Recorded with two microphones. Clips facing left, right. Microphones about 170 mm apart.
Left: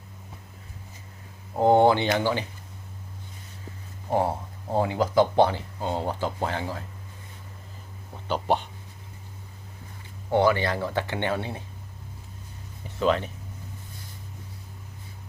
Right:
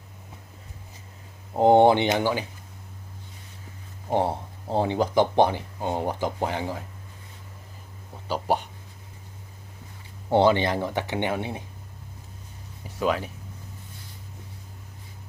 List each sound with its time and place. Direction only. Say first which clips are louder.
1.5 s speech: right 2 dB; 20° right (ahead or behind)
4.7 s speech: even; 25° right (ahead or behind)
8.3 s speech: even; 10° right (ahead or behind)
10.3 s speech: right 2 dB; 25° right (ahead or behind)
13.0 s speech: left 2 dB; 10° right (ahead or behind)